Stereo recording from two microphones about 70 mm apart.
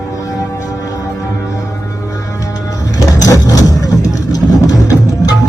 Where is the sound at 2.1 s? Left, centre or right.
Left.